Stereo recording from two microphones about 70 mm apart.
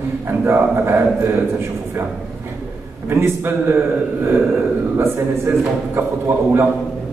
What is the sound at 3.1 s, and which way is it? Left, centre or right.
A man's voice, right.